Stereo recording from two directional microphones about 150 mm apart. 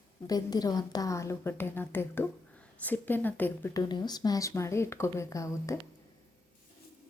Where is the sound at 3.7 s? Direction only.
30° left (ahead or behind).